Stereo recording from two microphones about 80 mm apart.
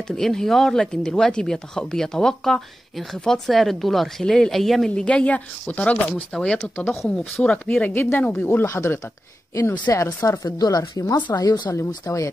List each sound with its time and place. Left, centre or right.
0.1 s speech: centre
7.8 s speech: left
8.5 s speech: left
10.4 s speech: left
12.1 s speech: left